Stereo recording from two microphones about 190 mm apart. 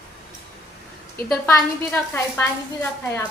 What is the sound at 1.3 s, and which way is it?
A woman's voice, 10° left (ahead or behind).